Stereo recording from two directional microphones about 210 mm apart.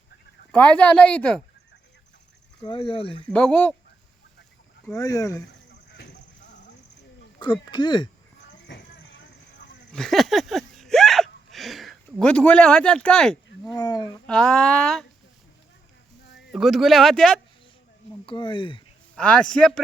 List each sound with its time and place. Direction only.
0.5 s speech: 5° left (ahead or behind)
2.6 s speech: 25° left (ahead or behind)
3.3 s speech: 5° left (ahead or behind)
4.9 s speech: 15° left (ahead or behind)
5.5 s a sound: 50° left (ahead or behind)
7.7 s speech: 20° left (ahead or behind)
8.6 s a sound: 55° left (ahead or behind)
9.9 s a sound: centre (ahead or behind)
12.2 s speech: 5° left (ahead or behind)
13.7 s speech: 20° left (ahead or behind)
14.3 s speech: 5° left (ahead or behind)
16.5 s speech: centre (ahead or behind)
18.3 s speech: 25° left (ahead or behind)
19.1 s speech: 5° left (ahead or behind)